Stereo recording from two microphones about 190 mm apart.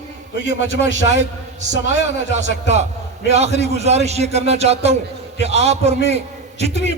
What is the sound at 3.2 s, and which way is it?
A man's voice, 35° right (ahead or behind).